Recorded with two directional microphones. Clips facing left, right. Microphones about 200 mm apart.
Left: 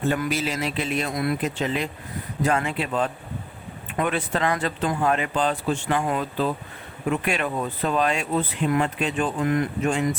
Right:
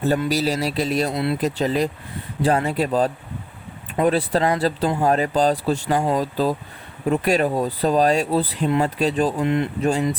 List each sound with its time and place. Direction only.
0.0 s speech: 35° right (ahead or behind)
9.4 s speech: 25° right (ahead or behind)